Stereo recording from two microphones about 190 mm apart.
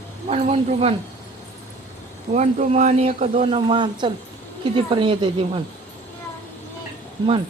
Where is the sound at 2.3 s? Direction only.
35° right (ahead or behind).